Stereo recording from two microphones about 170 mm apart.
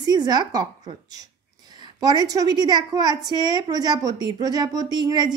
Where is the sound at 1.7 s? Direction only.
25° right (ahead or behind).